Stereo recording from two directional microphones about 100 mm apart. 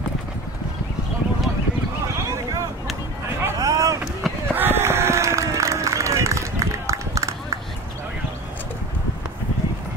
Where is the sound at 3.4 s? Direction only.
35° right (ahead or behind).